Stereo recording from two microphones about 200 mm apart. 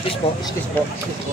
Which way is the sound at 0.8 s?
10° left (ahead or behind).